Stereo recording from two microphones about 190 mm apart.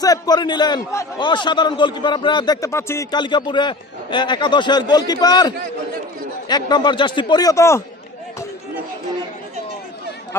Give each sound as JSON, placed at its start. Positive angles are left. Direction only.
{"t": 0.0, "sound": "a man's voice", "side_deg": 20}